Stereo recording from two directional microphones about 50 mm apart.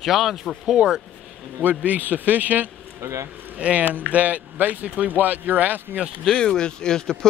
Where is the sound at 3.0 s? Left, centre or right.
Right.